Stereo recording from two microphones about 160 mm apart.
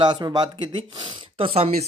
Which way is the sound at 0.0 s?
30° right (ahead or behind).